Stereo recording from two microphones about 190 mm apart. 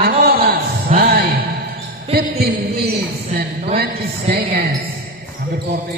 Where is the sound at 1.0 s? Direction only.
55° right (ahead or behind).